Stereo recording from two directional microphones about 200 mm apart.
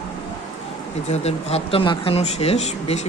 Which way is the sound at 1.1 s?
30° left (ahead or behind).